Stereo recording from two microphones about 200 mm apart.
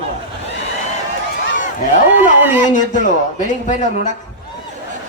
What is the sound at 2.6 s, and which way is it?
Speech, 40° left (ahead or behind).